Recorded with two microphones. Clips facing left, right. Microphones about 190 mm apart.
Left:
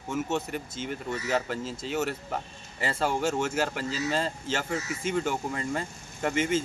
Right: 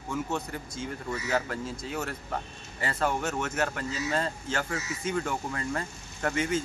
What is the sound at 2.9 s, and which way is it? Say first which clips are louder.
Speech: left 2 dB; 30° left (ahead or behind).